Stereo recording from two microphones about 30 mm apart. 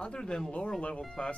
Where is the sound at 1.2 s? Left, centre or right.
Left.